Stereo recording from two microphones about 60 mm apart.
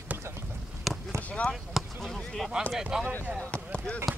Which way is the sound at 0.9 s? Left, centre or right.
Centre.